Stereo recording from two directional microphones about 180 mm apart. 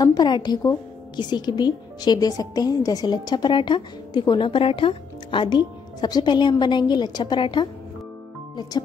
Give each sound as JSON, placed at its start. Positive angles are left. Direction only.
{"t": 0.0, "sound": "a woman's voice", "side_deg": 25}